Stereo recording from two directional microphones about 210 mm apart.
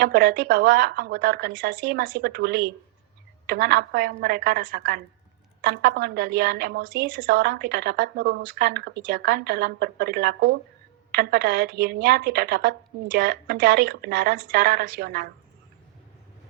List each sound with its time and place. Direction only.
0.0 s a woman's voice: 50° right (ahead or behind)